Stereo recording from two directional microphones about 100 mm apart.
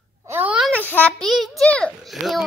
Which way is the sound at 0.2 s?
25° right (ahead or behind).